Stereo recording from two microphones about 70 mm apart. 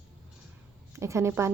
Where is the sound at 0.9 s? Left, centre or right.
Right.